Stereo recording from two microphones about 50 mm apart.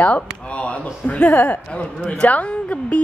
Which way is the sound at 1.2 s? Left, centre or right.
Left.